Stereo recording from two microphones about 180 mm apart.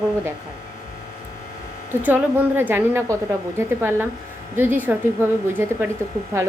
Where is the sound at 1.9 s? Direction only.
10° right (ahead or behind).